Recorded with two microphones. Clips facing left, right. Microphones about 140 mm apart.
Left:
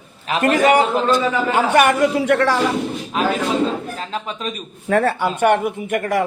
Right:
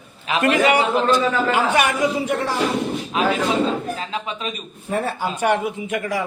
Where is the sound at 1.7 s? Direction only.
55° left (ahead or behind); by 2.6 s 75° left (ahead or behind).